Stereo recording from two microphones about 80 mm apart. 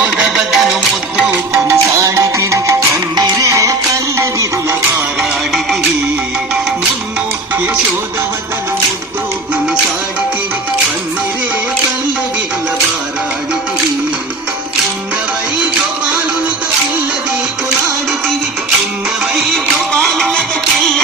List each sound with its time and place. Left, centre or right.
0.0 s music: centre
1.1 s music: centre
1.7 s music: right
19.9 s music: centre